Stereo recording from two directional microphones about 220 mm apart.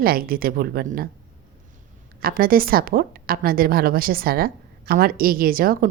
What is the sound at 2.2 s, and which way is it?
A woman's voice, 40° right (ahead or behind).